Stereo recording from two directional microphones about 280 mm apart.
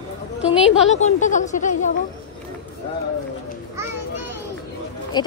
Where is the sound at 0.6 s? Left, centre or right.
Left.